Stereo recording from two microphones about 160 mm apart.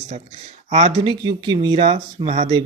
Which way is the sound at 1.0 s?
30° right (ahead or behind).